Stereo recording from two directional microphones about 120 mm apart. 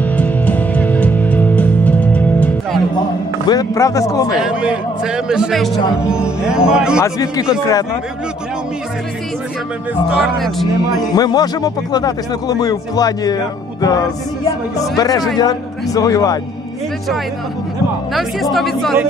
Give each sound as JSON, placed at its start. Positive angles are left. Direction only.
{"t": 0.0, "sound": "music", "side_deg": 15}
{"t": 3.4, "sound": "speech", "side_deg": 30}
{"t": 4.4, "sound": "a man's voice", "side_deg": -10}
{"t": 7.0, "sound": "speech", "side_deg": 30}
{"t": 10.1, "sound": "speech", "side_deg": 0}
{"t": 11.1, "sound": "speech", "side_deg": 35}
{"t": 15.0, "sound": "speech", "side_deg": 30}
{"t": 18.1, "sound": "speech", "side_deg": 0}